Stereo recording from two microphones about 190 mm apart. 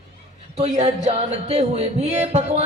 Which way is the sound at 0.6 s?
35° right (ahead or behind).